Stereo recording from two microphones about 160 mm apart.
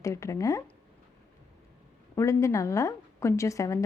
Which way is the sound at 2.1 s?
20° left (ahead or behind).